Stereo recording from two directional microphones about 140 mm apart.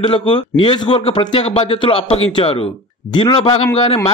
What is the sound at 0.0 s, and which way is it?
A man's voice, 40° left (ahead or behind).